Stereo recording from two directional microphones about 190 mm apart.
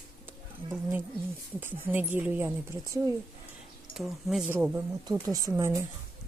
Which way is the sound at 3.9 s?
Centre (ahead or behind).